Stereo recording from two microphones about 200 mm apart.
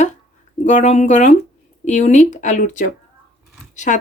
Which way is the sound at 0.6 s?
35° left (ahead or behind).